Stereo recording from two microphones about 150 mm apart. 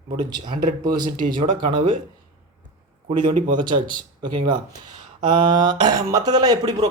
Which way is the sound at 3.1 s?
30° right (ahead or behind).